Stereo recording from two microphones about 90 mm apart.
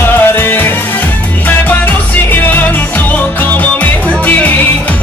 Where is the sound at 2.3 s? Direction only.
20° left (ahead or behind).